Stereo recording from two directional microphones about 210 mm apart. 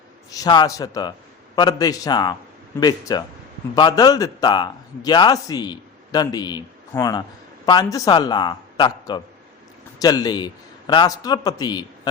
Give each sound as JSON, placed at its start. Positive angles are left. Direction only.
{"t": 0.3, "sound": "a man's voice", "side_deg": 20}